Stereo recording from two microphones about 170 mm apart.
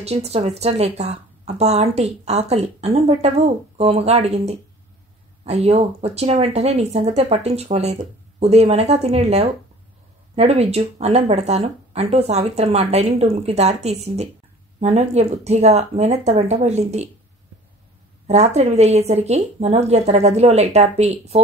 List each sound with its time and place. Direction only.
0.0 s speech: 40° right (ahead or behind)
18.2 s speech: 40° right (ahead or behind)